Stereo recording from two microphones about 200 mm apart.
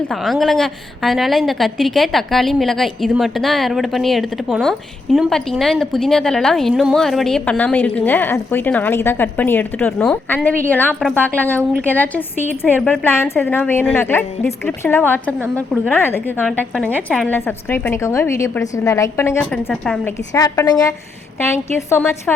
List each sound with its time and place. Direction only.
0.1 s a woman's voice: centre (ahead or behind)
20.3 s a woman's voice: 15° left (ahead or behind)